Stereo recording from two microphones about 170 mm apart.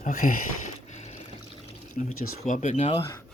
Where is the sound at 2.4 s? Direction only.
45° left (ahead or behind).